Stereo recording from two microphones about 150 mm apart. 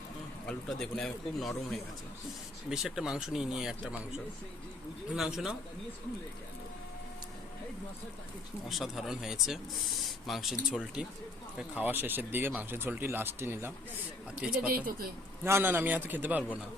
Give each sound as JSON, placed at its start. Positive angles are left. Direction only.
{"t": 0.4, "sound": "speech", "side_deg": 5}
{"t": 5.1, "sound": "speech", "side_deg": -5}
{"t": 8.7, "sound": "speech", "side_deg": 0}
{"t": 14.7, "sound": "speech", "side_deg": -80}
{"t": 15.4, "sound": "speech", "side_deg": -15}